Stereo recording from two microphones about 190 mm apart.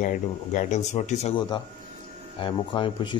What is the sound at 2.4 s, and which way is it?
Speech, 25° left (ahead or behind).